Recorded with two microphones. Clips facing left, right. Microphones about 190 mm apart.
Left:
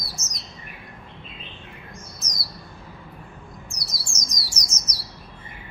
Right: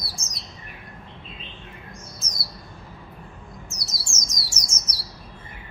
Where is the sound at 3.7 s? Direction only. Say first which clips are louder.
Even; 25° right (ahead or behind).